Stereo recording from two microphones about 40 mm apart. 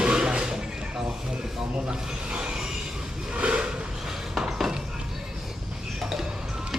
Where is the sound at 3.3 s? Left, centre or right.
Right.